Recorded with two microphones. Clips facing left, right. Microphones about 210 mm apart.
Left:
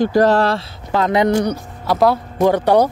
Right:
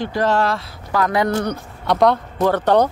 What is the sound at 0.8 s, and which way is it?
Speech, 25° left (ahead or behind).